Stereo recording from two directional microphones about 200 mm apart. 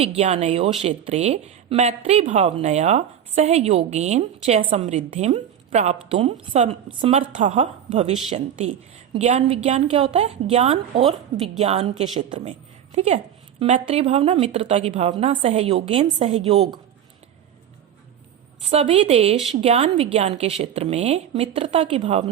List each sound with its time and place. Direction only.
0.2 s a woman's voice: 35° right (ahead or behind)
9.1 s a woman's voice: 35° right (ahead or behind)
18.7 s a woman's voice: 30° right (ahead or behind)